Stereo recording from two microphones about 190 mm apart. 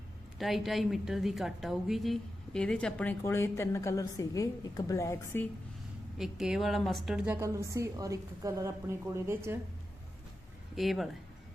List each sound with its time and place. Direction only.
0.3 s a woman's voice: centre (ahead or behind)
6.1 s a woman's voice: centre (ahead or behind)
7.3 s a woman's voice: 15° right (ahead or behind)
10.8 s a woman's voice: centre (ahead or behind)